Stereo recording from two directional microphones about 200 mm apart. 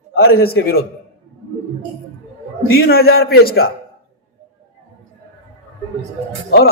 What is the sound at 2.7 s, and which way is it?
Speech, 50° left (ahead or behind).